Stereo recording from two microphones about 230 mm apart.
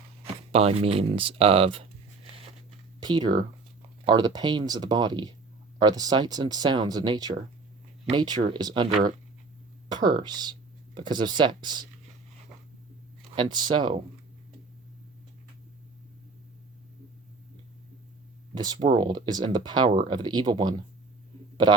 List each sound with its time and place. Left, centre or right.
0.5 s speech: right
13.3 s speech: centre
18.5 s speech: centre